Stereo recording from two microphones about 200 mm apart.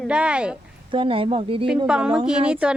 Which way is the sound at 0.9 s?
25° right (ahead or behind).